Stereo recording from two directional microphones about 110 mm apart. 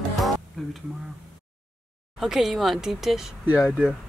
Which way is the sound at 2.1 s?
5° right (ahead or behind).